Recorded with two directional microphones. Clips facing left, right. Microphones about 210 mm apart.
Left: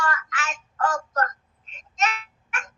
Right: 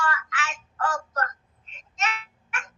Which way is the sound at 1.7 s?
40° left (ahead or behind).